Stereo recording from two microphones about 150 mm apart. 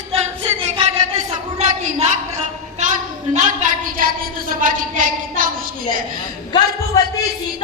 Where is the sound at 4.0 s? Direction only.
70° right (ahead or behind).